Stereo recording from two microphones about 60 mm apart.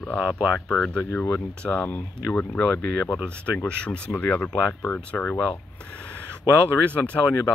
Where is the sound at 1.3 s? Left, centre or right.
Centre.